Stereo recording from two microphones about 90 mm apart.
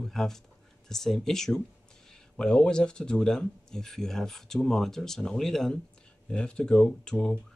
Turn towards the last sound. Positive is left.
turn(degrees=10)  # may be behind; listen again after turning